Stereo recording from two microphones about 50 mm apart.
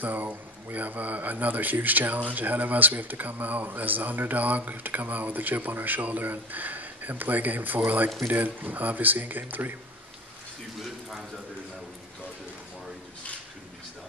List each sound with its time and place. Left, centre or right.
0.0 s speech: right